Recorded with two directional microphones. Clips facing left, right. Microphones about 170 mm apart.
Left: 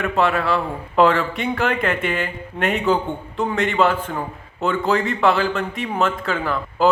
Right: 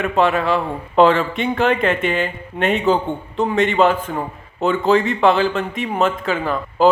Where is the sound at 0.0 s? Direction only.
20° right (ahead or behind).